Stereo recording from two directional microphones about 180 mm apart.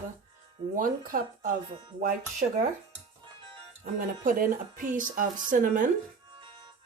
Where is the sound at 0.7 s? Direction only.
50° right (ahead or behind).